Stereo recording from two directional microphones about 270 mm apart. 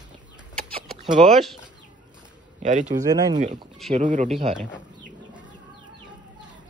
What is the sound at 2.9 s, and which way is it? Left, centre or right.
Speech, centre.